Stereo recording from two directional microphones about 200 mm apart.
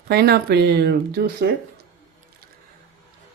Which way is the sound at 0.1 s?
50° right (ahead or behind).